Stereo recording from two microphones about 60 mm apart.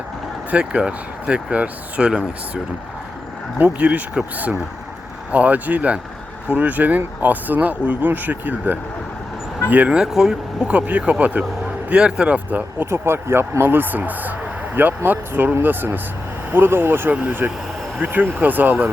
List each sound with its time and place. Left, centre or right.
0.5 s speech: centre
3.6 s speech: right
5.3 s speech: right
10.0 s speech: centre
10.7 s speech: right
12.8 s speech: right